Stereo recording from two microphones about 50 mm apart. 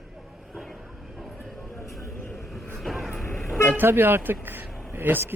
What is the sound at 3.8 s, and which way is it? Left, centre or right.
A man's voice, right.